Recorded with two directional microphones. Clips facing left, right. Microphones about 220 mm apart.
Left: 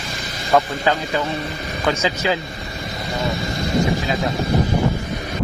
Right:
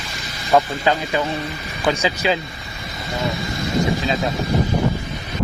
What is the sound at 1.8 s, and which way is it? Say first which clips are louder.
Speech: right 1 dB; 15° right (ahead or behind).